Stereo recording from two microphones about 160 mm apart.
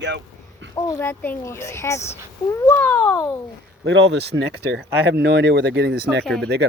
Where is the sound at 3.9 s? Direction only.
90° right.